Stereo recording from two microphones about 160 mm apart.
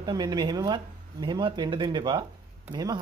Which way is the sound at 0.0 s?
25° right (ahead or behind).